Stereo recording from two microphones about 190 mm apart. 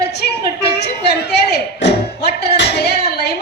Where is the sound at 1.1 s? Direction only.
60° left (ahead or behind).